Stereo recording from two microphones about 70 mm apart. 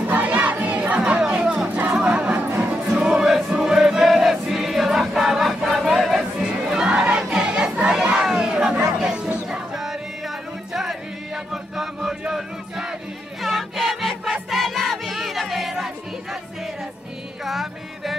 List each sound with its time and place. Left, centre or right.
0.1 s crowd: right
2.0 s music: right
3.0 s choir: centre
7.2 s crowd: centre
9.8 s music: centre
17.5 s music: centre